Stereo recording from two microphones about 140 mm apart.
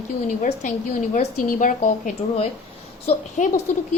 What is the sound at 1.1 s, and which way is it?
A woman's voice, 65° left (ahead or behind).